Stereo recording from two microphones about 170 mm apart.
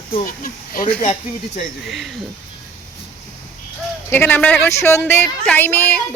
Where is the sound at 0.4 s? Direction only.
60° left (ahead or behind).